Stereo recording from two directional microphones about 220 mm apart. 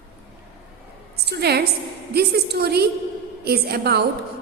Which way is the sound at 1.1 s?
50° right (ahead or behind).